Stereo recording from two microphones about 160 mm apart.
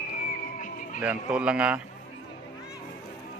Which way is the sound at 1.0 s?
5° right (ahead or behind).